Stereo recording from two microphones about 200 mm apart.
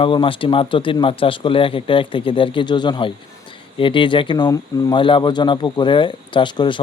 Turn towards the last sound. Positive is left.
turn(degrees=25)  # may be behind; listen again after turning